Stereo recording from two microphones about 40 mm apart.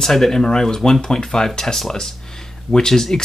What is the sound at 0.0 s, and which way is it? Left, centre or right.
Speech, centre.